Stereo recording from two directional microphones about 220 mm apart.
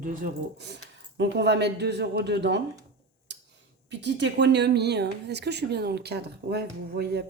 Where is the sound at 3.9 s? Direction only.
50° right (ahead or behind).